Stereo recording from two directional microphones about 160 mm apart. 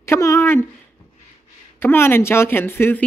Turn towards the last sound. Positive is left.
turn(degrees=15)  # may be behind; listen again after turning